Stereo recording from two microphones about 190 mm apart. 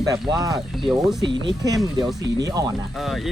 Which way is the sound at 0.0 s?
20° right (ahead or behind).